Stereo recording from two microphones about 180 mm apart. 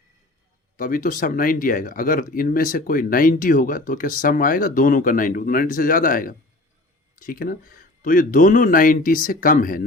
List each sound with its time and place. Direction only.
0.8 s speech: 50° left (ahead or behind)